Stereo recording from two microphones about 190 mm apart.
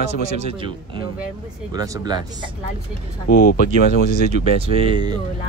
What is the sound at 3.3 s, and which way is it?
Speech, 50° left (ahead or behind).